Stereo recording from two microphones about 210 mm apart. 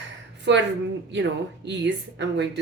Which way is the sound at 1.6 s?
55° right (ahead or behind).